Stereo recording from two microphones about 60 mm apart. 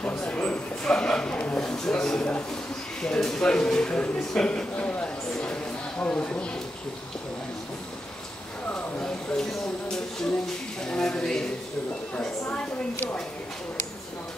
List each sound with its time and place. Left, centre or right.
0.0 s a sound: left
0.8 s speech: centre
1.6 s a woman's voice: centre
8.6 s a sound: left
9.0 s speech: centre
12.4 s a woman's voice: left